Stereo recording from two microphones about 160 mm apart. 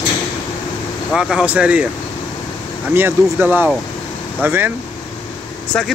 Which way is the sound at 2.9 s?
15° right (ahead or behind).